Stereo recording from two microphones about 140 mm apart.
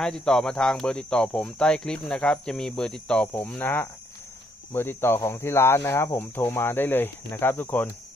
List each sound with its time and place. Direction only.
0.0 s speech: 5° left (ahead or behind)